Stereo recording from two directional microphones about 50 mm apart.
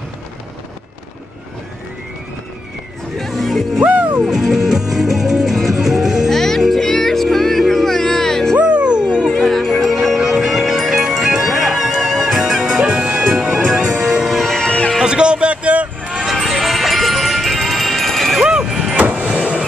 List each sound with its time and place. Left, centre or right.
3.2 s music: centre
3.8 s music: right
4.3 s music: centre
6.3 s music: centre
8.5 s music: right
9.4 s music: centre
14.2 s music: centre
14.7 s music: left
15.0 s a sound: centre
16.2 s music: centre
18.4 s vehicle: centre